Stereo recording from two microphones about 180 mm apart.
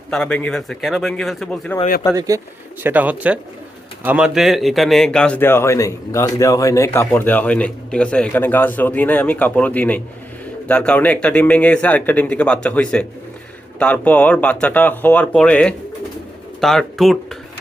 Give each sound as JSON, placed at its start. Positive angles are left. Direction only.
{"t": 0.1, "sound": "speech", "side_deg": 5}
{"t": 2.1, "sound": "speech", "side_deg": -20}
{"t": 2.8, "sound": "a man's voice", "side_deg": -10}